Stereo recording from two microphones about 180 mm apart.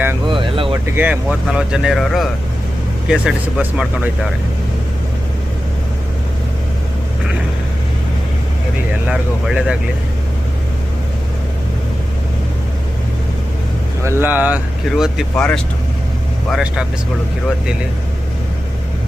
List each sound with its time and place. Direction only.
0.3 s vehicle: 30° right (ahead or behind)
0.9 s speech: 10° right (ahead or behind)
9.0 s speech: 5° right (ahead or behind)
14.0 s speech: 15° right (ahead or behind)